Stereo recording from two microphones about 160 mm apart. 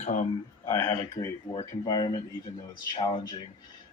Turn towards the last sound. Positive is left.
turn(degrees=25)  # may be behind; listen again after turning